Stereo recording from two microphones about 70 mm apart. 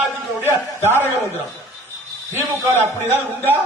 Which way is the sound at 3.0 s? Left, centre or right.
Left.